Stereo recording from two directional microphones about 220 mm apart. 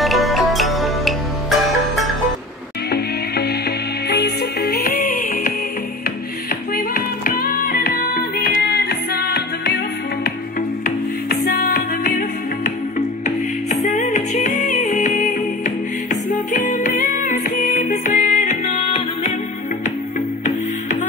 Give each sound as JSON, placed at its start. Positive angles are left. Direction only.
{"t": 0.0, "sound": "music", "side_deg": 0}
{"t": 2.9, "sound": "music", "side_deg": 45}
{"t": 6.5, "sound": "music", "side_deg": 40}
{"t": 11.2, "sound": "music", "side_deg": 45}